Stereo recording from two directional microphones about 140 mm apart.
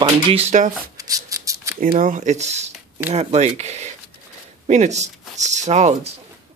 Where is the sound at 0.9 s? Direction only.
25° right (ahead or behind).